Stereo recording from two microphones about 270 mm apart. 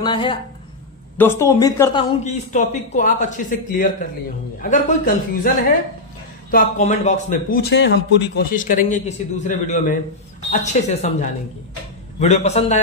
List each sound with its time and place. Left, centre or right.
0.0 s a man's voice: centre
6.5 s a man's voice: left